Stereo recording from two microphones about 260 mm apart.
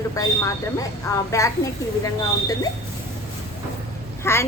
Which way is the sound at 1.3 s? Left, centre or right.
Centre.